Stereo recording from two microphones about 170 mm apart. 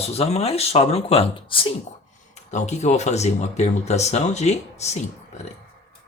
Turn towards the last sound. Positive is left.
turn(degrees=40)  # may be behind; listen again after turning